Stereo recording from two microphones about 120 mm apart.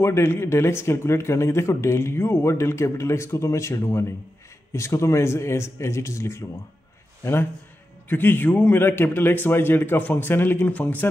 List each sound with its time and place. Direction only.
0.0 s a man's voice: 20° left (ahead or behind)
8.1 s a man's voice: 15° left (ahead or behind)